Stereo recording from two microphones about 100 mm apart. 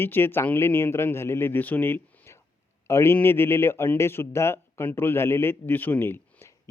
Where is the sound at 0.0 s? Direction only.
20° left (ahead or behind).